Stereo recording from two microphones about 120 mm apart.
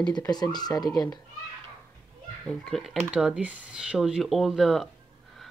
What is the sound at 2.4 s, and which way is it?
Speech, 5° left (ahead or behind).